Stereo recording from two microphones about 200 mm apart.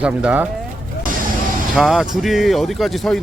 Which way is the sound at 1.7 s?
Centre (ahead or behind).